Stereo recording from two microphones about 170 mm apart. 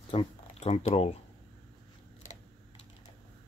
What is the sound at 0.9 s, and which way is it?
Speech, 35° left (ahead or behind).